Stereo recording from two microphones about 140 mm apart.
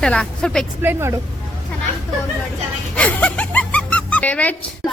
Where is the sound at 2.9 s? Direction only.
10° left (ahead or behind).